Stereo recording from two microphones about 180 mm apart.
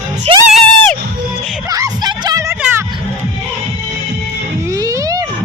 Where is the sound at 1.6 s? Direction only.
20° right (ahead or behind).